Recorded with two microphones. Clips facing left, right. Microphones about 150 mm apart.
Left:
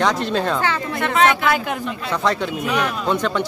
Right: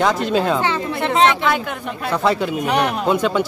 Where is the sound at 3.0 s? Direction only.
5° right (ahead or behind).